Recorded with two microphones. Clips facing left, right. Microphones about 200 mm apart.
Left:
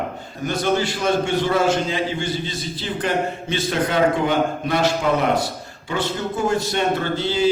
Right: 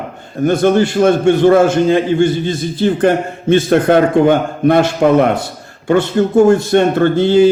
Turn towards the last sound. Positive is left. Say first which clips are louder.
# right 12 dB
turn(degrees=-55)  # may be behind; listen again after turning